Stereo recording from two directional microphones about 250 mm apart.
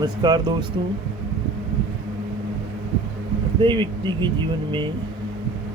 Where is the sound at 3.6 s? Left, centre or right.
Centre.